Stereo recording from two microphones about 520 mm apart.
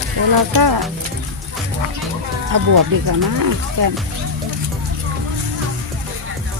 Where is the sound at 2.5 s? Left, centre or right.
Right.